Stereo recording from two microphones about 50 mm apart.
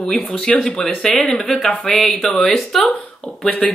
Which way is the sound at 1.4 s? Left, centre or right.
Centre.